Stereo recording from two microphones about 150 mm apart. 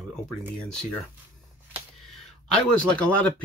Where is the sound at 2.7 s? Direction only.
10° left (ahead or behind).